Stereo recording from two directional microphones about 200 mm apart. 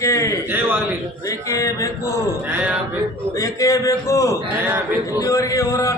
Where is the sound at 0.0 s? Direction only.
15° left (ahead or behind).